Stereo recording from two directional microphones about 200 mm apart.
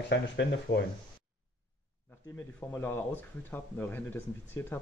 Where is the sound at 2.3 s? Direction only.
10° left (ahead or behind).